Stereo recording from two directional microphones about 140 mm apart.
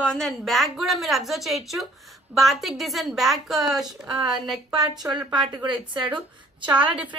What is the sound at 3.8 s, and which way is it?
Speech, 30° right (ahead or behind).